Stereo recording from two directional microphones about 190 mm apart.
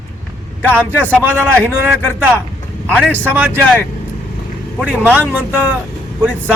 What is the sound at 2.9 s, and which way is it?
Speech, 5° left (ahead or behind).